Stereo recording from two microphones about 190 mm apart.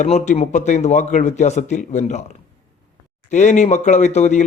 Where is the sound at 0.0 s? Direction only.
35° left (ahead or behind).